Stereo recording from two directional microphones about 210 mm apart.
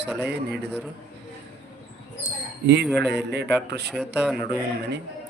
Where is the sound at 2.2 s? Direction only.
55° right (ahead or behind).